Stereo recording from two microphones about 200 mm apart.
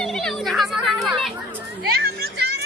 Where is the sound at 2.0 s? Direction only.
50° right (ahead or behind).